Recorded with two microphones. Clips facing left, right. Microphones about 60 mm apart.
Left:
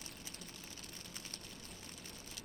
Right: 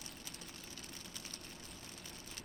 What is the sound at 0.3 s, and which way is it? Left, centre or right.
Vehicle, right.